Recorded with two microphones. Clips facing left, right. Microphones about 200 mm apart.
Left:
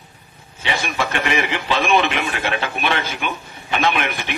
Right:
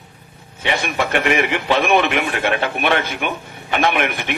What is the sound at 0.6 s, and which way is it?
A man's voice, 55° right (ahead or behind).